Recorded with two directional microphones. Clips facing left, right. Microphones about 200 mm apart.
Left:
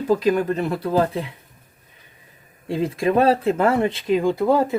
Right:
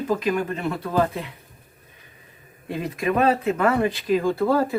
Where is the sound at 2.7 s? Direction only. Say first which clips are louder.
Left 4 dB; 30° left (ahead or behind).